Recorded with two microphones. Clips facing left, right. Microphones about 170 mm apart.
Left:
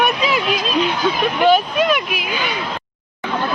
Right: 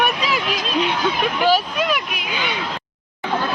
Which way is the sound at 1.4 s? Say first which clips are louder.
Left 5 dB; centre (ahead or behind).